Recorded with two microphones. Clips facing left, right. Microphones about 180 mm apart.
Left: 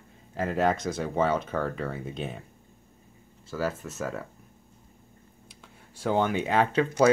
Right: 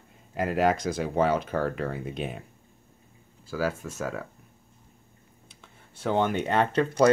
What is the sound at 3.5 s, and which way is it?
Speech, centre (ahead or behind).